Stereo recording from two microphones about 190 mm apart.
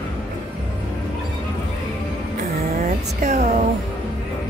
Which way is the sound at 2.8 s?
35° right (ahead or behind).